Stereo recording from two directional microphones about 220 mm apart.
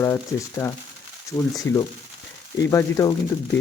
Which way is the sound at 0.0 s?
10° left (ahead or behind).